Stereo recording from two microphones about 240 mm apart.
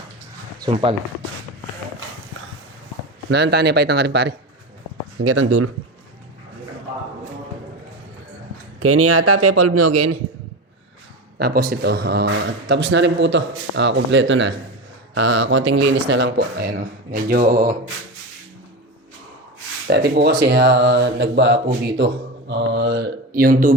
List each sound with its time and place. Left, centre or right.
0.6 s speech: right
3.2 s speech: right
5.2 s a man's voice: right
8.8 s a man's voice: right
11.3 s speech: right
19.9 s speech: right